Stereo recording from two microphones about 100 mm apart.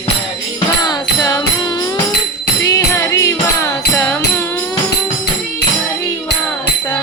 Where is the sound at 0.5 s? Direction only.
40° left (ahead or behind).